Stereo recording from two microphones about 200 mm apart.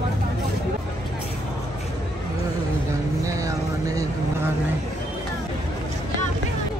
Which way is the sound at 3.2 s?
15° right (ahead or behind).